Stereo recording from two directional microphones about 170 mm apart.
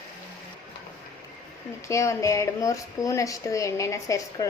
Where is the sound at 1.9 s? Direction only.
15° left (ahead or behind).